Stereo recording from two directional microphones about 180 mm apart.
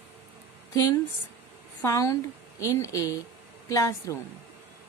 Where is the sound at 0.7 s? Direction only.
20° left (ahead or behind).